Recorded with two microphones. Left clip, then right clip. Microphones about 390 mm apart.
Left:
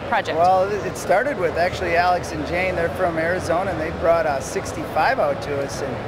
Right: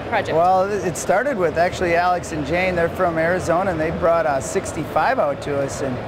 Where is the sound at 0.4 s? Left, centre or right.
Right.